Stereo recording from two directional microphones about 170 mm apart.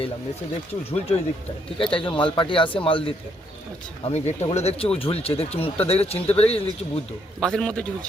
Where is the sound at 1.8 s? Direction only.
30° left (ahead or behind).